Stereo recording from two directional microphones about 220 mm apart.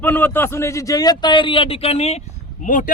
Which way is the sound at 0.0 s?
10° left (ahead or behind).